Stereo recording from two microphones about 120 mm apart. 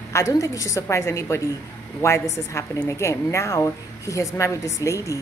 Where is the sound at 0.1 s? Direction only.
30° left (ahead or behind).